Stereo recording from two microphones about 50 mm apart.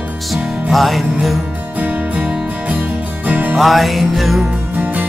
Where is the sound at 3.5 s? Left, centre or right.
Centre.